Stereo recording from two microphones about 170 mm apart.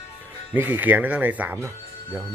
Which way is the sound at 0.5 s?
10° right (ahead or behind).